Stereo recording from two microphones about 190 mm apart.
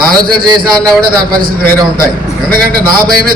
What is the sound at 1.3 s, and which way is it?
A man's voice, 50° right (ahead or behind).